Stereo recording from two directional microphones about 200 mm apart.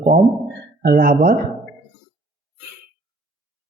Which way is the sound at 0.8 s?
45° right (ahead or behind).